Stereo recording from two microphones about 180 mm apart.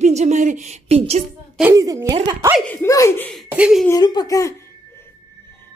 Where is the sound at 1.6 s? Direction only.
15° right (ahead or behind).